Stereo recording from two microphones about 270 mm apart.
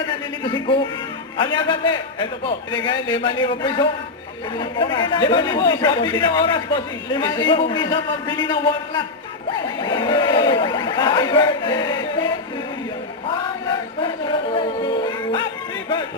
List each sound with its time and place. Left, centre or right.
0.0 s a man's voice: centre
14.5 s music: centre